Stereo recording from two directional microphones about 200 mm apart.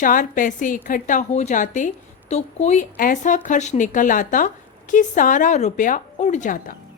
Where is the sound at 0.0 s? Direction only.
40° left (ahead or behind).